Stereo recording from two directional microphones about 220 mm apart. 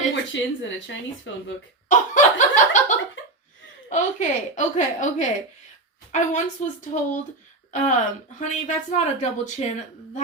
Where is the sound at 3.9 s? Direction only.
35° left (ahead or behind).